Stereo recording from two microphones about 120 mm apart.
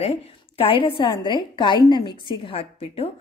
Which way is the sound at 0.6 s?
50° left (ahead or behind).